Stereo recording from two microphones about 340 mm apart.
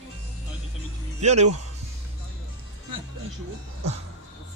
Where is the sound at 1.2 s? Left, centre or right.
Centre.